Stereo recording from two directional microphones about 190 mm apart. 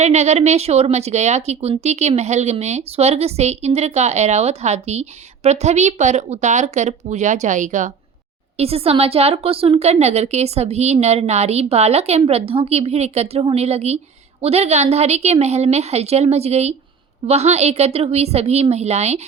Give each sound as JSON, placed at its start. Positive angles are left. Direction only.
{"t": 0.0, "sound": "a woman's voice", "side_deg": -35}